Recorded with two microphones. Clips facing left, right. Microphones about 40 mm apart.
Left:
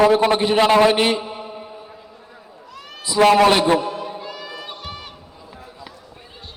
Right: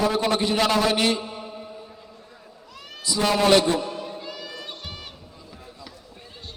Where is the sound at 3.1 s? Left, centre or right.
Left.